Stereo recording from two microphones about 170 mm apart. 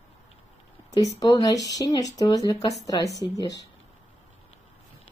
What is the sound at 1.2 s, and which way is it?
Speech, 20° left (ahead or behind).